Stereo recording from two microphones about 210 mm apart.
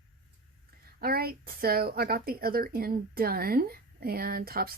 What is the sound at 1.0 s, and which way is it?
A woman's voice, 45° right (ahead or behind).